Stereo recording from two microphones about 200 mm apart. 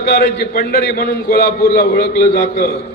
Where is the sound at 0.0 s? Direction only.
50° left (ahead or behind).